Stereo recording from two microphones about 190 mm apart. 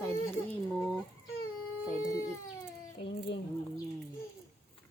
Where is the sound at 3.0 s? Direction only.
70° left (ahead or behind).